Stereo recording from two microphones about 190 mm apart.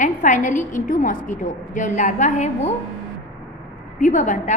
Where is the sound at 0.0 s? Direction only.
40° left (ahead or behind).